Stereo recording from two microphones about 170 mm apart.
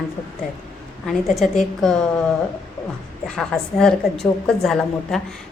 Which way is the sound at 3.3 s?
5° left (ahead or behind).